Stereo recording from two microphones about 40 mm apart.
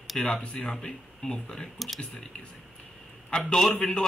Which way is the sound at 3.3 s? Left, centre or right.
Centre.